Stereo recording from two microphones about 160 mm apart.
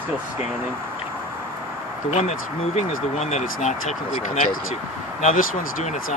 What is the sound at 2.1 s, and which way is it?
Speech, 45° left (ahead or behind).